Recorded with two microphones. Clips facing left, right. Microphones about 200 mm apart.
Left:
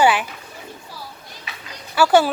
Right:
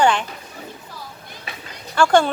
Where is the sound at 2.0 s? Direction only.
5° left (ahead or behind).